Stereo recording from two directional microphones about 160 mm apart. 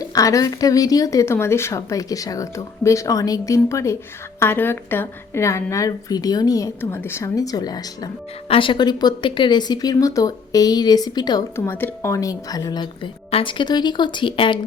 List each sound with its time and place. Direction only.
0.0 s speech: 20° left (ahead or behind)